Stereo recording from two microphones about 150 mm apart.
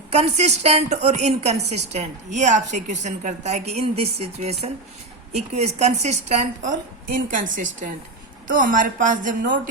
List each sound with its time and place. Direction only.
0.1 s a woman's voice: 45° right (ahead or behind)